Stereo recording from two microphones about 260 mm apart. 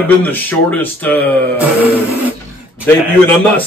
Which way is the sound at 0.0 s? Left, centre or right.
Centre.